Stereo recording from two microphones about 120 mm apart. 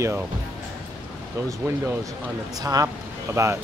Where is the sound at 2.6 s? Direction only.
30° right (ahead or behind).